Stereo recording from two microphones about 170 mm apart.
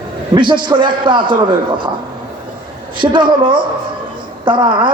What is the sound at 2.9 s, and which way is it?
A man's voice, 30° right (ahead or behind).